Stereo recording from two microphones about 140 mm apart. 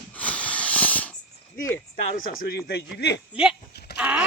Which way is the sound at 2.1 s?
90° left.